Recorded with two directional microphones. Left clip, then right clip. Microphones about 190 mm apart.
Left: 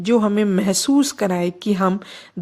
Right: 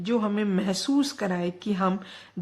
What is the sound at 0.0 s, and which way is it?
A woman's voice, 35° left (ahead or behind).